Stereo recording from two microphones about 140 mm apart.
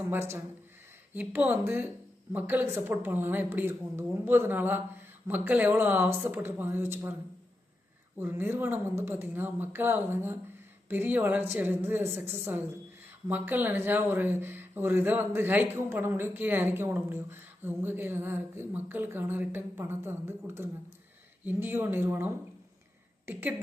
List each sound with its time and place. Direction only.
0.1 s a woman's voice: 15° right (ahead or behind)
8.2 s a woman's voice: 15° right (ahead or behind)